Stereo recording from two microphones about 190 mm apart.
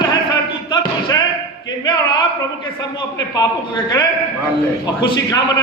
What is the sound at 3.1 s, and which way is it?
Speech, 20° left (ahead or behind).